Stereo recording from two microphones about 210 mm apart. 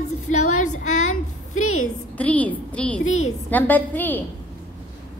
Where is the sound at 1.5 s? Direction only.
80° left.